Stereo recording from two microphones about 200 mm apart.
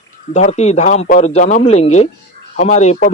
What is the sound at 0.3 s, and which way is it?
Speech, 35° left (ahead or behind).